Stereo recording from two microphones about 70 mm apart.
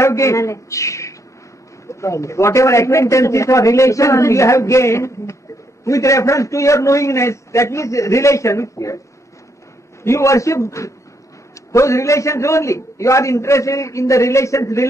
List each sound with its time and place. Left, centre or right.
0.0 s a man's voice: left
10.0 s a man's voice: left